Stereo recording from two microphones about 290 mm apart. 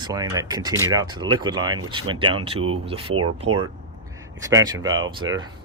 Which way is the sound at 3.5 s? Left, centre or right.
Right.